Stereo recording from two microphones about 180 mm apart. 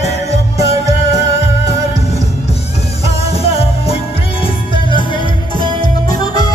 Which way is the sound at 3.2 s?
35° left (ahead or behind).